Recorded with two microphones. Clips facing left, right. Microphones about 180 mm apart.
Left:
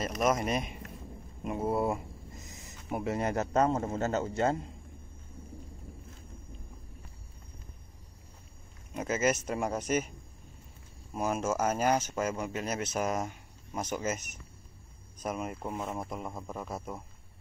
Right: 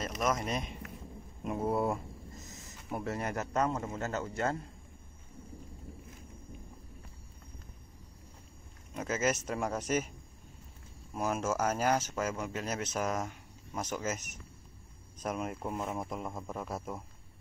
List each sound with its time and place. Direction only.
0.2 s a man's voice: 15° left (ahead or behind)
8.9 s speech: 5° left (ahead or behind)
11.1 s speech: centre (ahead or behind)